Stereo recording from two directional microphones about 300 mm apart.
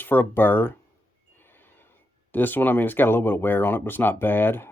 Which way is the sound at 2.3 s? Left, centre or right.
Centre.